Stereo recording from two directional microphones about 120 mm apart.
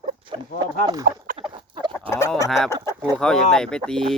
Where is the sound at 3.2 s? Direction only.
5° left (ahead or behind).